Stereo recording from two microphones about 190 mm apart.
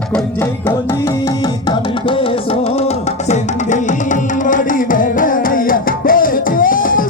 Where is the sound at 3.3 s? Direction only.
40° left (ahead or behind).